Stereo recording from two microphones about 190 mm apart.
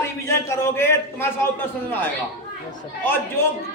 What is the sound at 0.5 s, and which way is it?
Speech, 10° left (ahead or behind).